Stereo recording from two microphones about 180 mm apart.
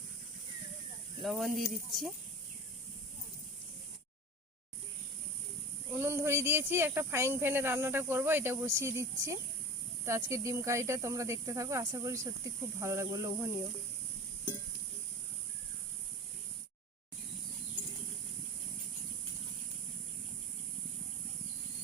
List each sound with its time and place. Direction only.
1.2 s speech: centre (ahead or behind)
5.9 s speech: 15° right (ahead or behind)